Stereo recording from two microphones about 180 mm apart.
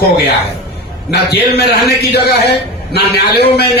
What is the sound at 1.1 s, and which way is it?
A man's voice, 65° left (ahead or behind).